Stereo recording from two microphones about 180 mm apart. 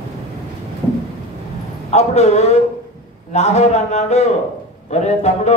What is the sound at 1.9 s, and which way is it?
Speech, 40° left (ahead or behind).